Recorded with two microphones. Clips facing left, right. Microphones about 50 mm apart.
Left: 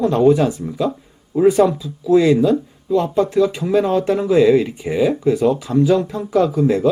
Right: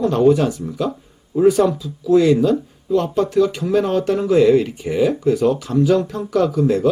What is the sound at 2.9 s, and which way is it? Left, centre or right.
Speech, left.